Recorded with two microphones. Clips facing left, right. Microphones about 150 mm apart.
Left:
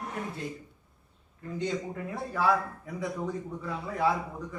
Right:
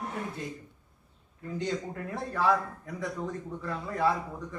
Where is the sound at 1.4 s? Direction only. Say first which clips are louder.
Even; centre (ahead or behind).